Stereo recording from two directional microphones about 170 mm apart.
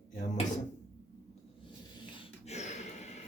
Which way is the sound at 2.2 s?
40° left (ahead or behind).